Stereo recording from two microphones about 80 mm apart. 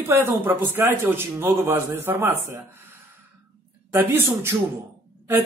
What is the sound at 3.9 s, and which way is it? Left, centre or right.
Speech, right.